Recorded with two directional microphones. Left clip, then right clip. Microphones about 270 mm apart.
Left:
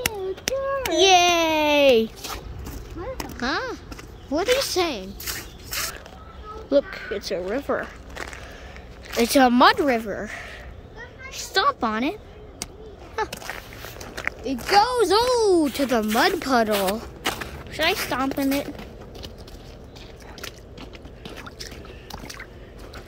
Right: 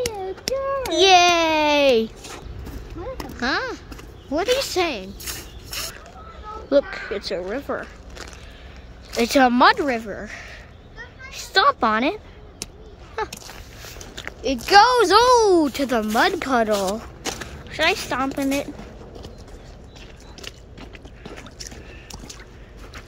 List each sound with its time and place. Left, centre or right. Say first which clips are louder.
0.0 s baby cry: right 1 dB; centre
3.3 s speech: right 3 dB; centre
5.2 s a sound: left 1 dB; centre
6.9 s speech: right 1 dB; centre
8.1 s a sound: left 4 dB; centre
9.1 s a woman's voice: right 1 dB; centre
11.2 s a sound: right 4 dB; centre
13.1 s speech: even; centre
14.4 s speech: right 5 dB; centre